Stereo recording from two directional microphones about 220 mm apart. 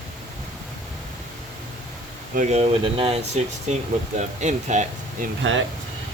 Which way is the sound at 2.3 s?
30° right (ahead or behind).